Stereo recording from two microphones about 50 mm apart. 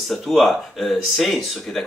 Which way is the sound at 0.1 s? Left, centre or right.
Centre.